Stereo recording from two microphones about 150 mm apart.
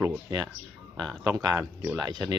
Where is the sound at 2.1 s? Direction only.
30° right (ahead or behind).